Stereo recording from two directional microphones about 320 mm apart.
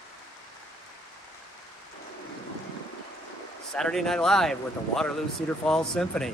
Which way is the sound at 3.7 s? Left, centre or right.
Centre.